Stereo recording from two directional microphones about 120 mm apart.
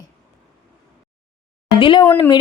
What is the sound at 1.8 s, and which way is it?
Speech, 40° left (ahead or behind).